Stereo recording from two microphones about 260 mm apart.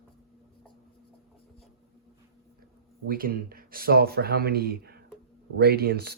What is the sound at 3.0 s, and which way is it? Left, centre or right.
Speech, right.